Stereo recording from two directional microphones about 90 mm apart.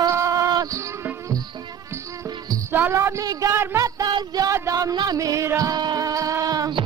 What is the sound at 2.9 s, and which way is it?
Music, 30° right (ahead or behind).